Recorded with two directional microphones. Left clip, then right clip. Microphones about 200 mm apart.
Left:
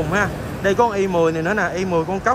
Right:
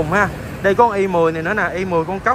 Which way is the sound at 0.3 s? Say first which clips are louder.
Left 1 dB; 50° left (ahead or behind).